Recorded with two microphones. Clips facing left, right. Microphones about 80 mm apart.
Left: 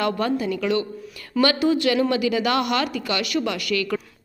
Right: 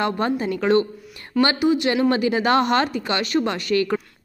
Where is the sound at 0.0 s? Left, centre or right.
Right.